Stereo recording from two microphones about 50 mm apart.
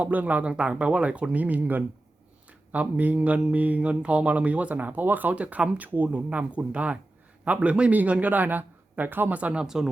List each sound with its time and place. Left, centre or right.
0.0 s speech: right
9.3 s speech: right
9.6 s speech: centre